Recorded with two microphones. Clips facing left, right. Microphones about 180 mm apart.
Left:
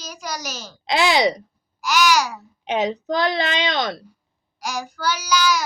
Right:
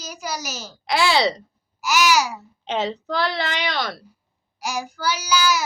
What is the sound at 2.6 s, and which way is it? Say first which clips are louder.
A woman's voice: left 3 dB; 15° left (ahead or behind).